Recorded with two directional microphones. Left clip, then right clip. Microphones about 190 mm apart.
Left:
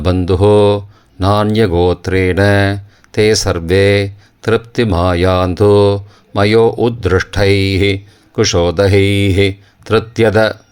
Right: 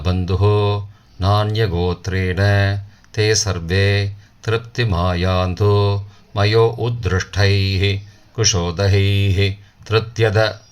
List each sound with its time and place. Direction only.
0.0 s mantra: 40° left (ahead or behind)
1.2 s speech: 45° left (ahead or behind)